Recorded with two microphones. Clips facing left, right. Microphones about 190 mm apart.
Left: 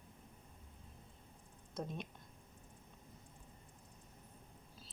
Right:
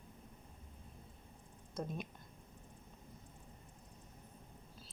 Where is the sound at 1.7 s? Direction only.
5° right (ahead or behind).